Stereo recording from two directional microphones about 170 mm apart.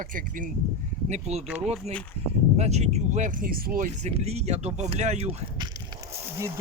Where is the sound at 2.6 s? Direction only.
40° right (ahead or behind).